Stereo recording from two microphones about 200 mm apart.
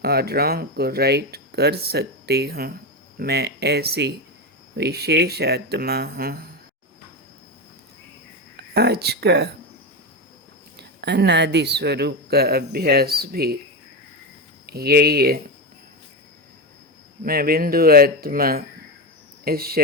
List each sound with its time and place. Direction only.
0.0 s speech: 50° right (ahead or behind)
8.7 s speech: 55° right (ahead or behind)
10.8 s speech: 55° right (ahead or behind)
14.7 s speech: 50° right (ahead or behind)
17.2 s speech: 50° right (ahead or behind)